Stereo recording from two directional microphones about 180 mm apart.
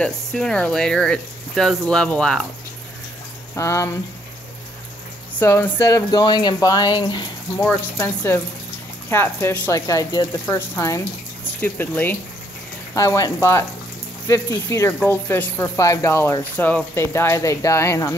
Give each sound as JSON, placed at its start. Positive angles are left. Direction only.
{"t": 0.0, "sound": "speech", "side_deg": 5}
{"t": 3.5, "sound": "speech", "side_deg": 15}
{"t": 5.3, "sound": "speech", "side_deg": 10}
{"t": 7.6, "sound": "speech", "side_deg": 15}